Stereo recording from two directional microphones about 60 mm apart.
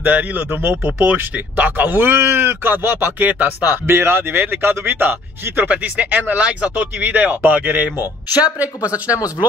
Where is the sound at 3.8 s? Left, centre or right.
Right.